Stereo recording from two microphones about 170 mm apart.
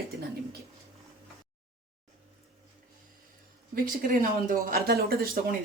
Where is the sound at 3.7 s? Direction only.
55° right (ahead or behind).